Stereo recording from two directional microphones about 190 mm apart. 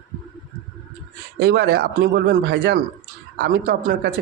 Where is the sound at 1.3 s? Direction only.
60° right (ahead or behind).